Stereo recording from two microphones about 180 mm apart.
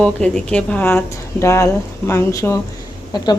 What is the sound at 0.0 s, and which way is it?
A woman's voice, 5° left (ahead or behind).